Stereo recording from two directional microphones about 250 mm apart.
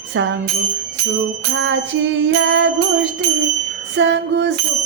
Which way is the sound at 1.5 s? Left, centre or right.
Right.